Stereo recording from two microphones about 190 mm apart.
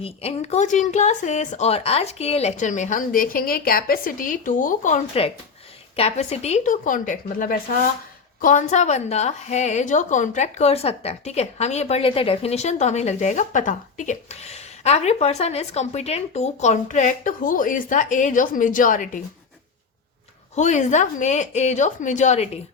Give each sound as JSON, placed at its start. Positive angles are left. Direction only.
{"t": 0.0, "sound": "a woman's voice", "side_deg": 30}
{"t": 20.6, "sound": "a woman's voice", "side_deg": 40}